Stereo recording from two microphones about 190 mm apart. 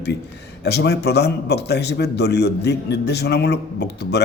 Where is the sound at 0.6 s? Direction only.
60° left (ahead or behind).